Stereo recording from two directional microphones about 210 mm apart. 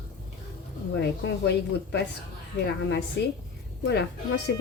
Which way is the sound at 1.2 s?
55° left (ahead or behind).